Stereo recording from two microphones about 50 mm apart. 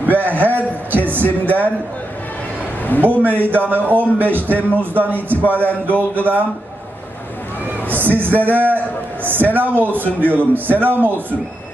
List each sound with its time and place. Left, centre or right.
0.0 s a sound: right
3.0 s a man's voice: right
7.9 s a man's voice: right